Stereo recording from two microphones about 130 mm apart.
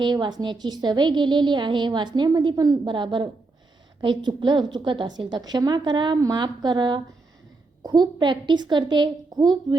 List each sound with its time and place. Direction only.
0.0 s a woman's voice: 35° right (ahead or behind)